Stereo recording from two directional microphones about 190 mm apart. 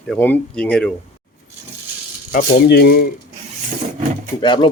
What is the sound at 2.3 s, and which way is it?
Speech, 60° left (ahead or behind).